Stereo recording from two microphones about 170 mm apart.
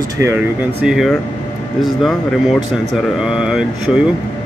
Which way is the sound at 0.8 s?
5° right (ahead or behind).